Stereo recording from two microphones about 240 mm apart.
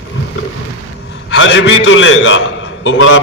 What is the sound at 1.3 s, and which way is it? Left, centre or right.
A man's voice, left.